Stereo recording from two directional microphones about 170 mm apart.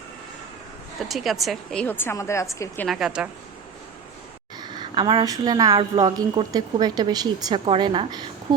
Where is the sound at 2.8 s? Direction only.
Centre (ahead or behind).